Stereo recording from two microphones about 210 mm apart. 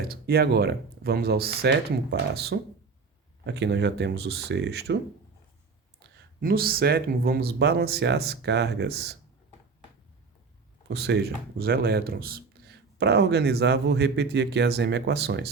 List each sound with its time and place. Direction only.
0.1 s speech: 50° right (ahead or behind)
6.0 s speech: 45° right (ahead or behind)
10.8 s speech: 55° right (ahead or behind)